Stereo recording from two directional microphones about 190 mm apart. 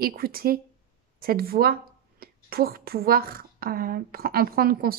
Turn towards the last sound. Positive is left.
turn(degrees=-50)  # may be behind; listen again after turning